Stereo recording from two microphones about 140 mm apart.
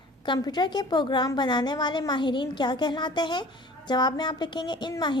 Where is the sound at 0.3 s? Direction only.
30° left (ahead or behind).